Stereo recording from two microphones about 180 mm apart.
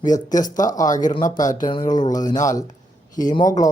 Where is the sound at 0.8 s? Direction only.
45° left (ahead or behind).